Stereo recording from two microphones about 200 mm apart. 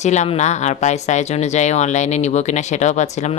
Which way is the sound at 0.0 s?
35° left (ahead or behind).